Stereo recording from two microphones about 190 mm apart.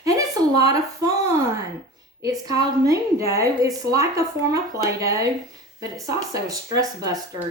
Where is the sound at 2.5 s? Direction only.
20° right (ahead or behind).